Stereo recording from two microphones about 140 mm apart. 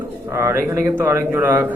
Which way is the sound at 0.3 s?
20° right (ahead or behind).